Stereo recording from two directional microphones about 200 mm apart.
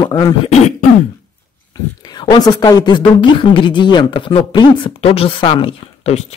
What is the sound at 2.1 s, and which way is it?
A woman's voice, 20° left (ahead or behind).